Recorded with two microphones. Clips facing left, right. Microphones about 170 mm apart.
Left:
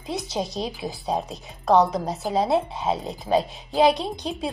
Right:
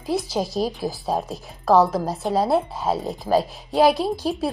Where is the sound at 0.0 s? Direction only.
Centre (ahead or behind).